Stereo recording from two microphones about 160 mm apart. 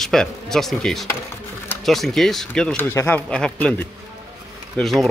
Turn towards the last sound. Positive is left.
turn(degrees=0)  # may be behind; listen again after turning